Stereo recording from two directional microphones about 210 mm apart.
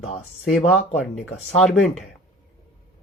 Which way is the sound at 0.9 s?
Centre (ahead or behind).